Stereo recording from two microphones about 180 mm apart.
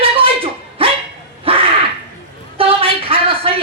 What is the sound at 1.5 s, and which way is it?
Crow, 30° right (ahead or behind).